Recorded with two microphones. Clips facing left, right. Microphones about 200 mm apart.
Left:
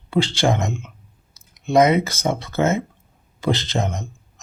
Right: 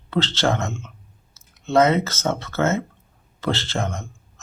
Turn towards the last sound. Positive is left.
turn(degrees=20)  # may be behind; listen again after turning